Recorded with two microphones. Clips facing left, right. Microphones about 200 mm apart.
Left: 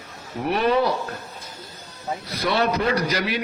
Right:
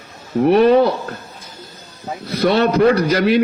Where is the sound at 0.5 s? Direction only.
45° right (ahead or behind).